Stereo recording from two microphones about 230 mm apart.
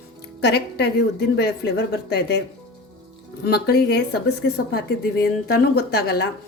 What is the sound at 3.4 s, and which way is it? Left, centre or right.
A woman's voice, left.